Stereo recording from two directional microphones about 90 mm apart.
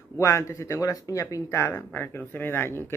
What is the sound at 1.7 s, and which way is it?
Speech, 20° left (ahead or behind).